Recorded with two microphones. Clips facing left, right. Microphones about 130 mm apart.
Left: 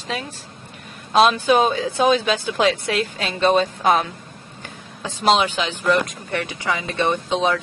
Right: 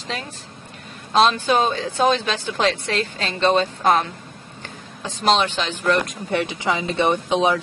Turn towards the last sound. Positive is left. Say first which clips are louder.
# right 1 dB
turn(degrees=-15)  # may be behind; listen again after turning